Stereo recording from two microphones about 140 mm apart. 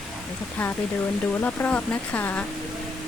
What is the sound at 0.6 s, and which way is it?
Speech, 10° left (ahead or behind).